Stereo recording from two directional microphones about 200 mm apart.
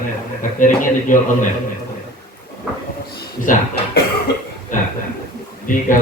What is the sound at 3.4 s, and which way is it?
Speech, 40° left (ahead or behind).